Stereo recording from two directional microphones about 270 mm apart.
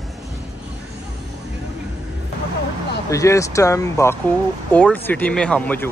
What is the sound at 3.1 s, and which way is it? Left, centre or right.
Speech, centre.